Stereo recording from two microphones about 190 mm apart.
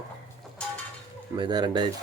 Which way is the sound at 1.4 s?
20° right (ahead or behind).